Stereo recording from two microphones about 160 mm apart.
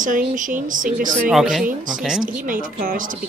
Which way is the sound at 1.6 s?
55° right (ahead or behind).